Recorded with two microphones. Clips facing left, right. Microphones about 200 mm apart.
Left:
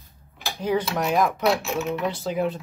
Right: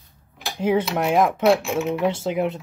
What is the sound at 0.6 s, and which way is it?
Speech, 25° right (ahead or behind).